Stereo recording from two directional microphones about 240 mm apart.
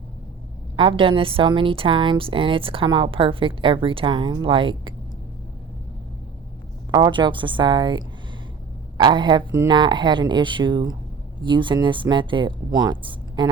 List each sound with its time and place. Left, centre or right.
0.8 s a woman's voice: right
6.9 s a woman's voice: centre